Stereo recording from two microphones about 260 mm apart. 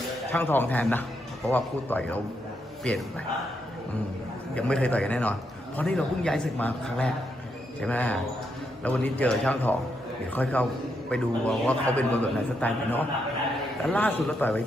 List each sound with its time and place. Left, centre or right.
0.3 s a man's voice: centre
4.5 s a man's voice: centre